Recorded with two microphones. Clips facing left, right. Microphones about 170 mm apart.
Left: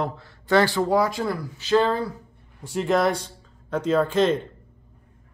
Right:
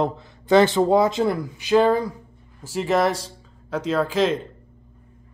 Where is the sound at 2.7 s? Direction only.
Centre (ahead or behind).